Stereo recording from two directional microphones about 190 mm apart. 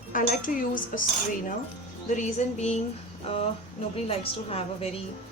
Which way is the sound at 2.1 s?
35° left (ahead or behind).